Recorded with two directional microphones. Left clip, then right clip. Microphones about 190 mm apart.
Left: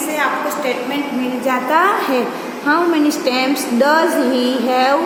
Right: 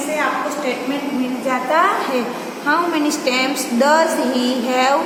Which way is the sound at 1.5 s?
40° left (ahead or behind).